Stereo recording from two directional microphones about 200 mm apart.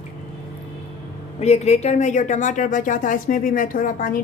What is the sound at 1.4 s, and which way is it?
A woman's voice, 35° left (ahead or behind).